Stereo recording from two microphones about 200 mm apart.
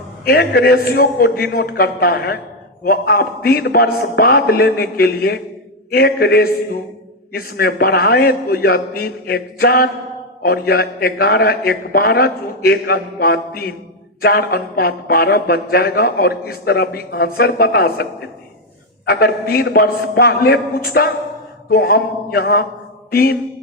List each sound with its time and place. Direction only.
0.3 s speech: 50° left (ahead or behind)